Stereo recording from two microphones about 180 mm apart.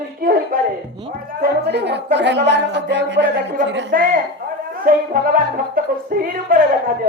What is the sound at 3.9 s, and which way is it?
Speech, 50° right (ahead or behind).